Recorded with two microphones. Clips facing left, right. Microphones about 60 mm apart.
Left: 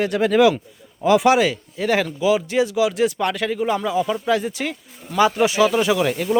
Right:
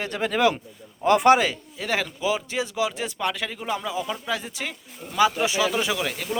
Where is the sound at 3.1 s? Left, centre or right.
Centre.